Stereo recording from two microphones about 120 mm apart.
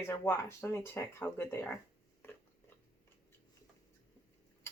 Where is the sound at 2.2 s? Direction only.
20° left (ahead or behind).